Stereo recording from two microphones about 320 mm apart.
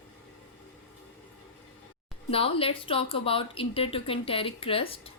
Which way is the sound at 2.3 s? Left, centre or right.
Centre.